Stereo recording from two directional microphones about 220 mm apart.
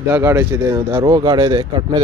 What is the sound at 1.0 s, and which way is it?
Speech, 20° right (ahead or behind).